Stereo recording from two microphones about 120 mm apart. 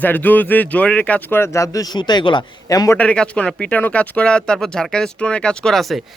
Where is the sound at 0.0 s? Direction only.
15° left (ahead or behind).